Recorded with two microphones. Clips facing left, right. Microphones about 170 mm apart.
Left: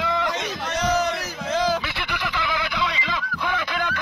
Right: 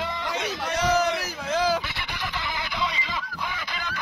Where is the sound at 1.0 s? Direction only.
5° right (ahead or behind).